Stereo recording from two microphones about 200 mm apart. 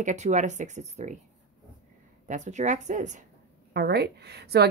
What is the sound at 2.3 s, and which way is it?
Speech, 35° right (ahead or behind).